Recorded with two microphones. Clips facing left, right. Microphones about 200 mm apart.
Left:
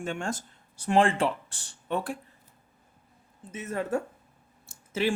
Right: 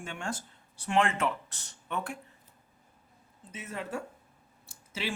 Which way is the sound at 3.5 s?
50° left (ahead or behind).